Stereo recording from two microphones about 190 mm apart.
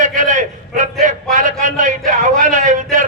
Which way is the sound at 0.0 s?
40° right (ahead or behind).